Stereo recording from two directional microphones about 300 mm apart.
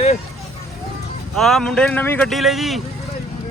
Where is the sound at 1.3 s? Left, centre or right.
Centre.